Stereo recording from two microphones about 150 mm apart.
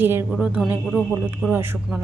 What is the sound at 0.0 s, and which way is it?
Speech, 15° right (ahead or behind).